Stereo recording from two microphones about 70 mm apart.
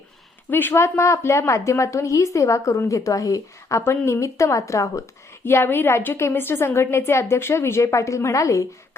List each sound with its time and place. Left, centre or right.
0.5 s a woman's voice: left
0.8 s a woman's voice: left
5.5 s a woman's voice: left